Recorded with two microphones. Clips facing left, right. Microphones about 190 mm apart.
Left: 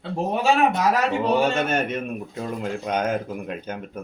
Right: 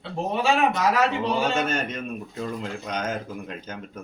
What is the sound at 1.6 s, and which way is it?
Speech, 60° left (ahead or behind).